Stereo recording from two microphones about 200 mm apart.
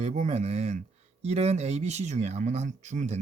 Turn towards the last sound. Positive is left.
turn(degrees=-35)  # may be behind; listen again after turning